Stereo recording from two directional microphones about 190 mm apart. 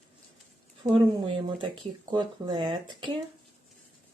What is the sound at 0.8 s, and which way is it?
Speech, 30° right (ahead or behind).